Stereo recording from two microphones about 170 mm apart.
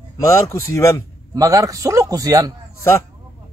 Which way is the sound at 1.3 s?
20° right (ahead or behind).